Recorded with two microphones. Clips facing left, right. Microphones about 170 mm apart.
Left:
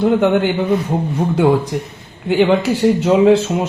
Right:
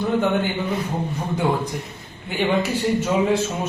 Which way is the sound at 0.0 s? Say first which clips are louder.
Left 7 dB; 80° left.